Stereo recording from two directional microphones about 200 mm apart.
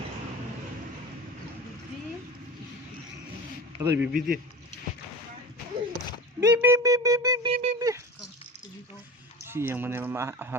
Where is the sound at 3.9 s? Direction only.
60° right (ahead or behind).